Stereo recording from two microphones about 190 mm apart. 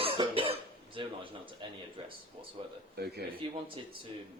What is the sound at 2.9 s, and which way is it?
Speech, 55° right (ahead or behind).